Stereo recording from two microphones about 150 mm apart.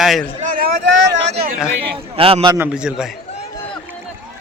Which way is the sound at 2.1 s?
40° right (ahead or behind).